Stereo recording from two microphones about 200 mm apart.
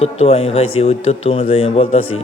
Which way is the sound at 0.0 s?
30° left (ahead or behind).